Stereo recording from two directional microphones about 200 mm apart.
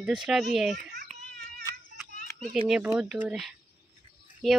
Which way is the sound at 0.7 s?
45° right (ahead or behind).